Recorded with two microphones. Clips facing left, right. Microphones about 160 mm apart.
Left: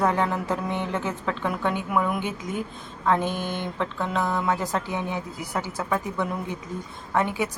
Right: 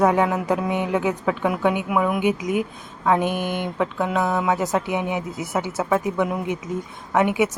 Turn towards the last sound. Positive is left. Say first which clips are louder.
# right 5 dB
turn(degrees=-20)  # may be behind; listen again after turning